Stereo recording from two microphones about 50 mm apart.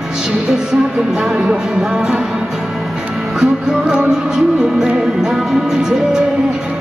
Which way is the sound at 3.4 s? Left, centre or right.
Centre.